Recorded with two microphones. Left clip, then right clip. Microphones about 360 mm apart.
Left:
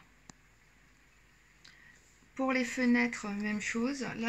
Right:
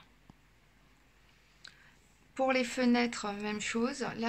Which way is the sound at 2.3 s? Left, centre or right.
Right.